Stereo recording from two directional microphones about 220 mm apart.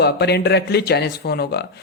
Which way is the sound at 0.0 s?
50° left (ahead or behind).